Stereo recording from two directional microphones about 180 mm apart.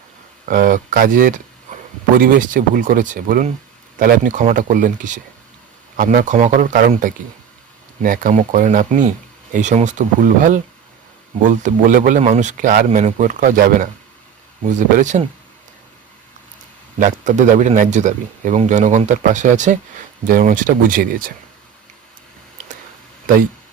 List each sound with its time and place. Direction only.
0.4 s speech: 45° right (ahead or behind)
17.0 s speech: 45° right (ahead or behind)